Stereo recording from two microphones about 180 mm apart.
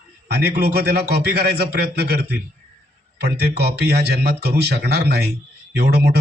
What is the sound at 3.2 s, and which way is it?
Speech, 65° right (ahead or behind).